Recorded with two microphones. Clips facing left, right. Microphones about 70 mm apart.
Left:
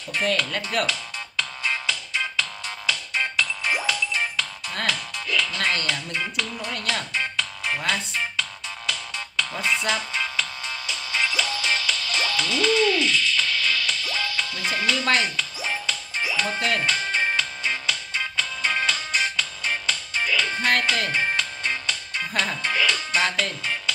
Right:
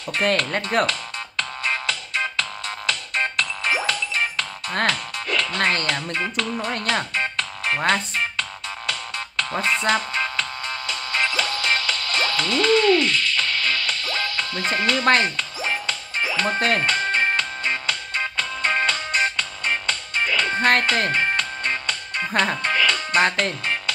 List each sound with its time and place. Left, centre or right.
0.1 s speech: right
1.6 s music: right
3.6 s music: centre
4.6 s speech: right
6.6 s music: right
14.5 s speech: right
15.9 s music: right
22.2 s speech: right
22.7 s music: centre
23.1 s speech: right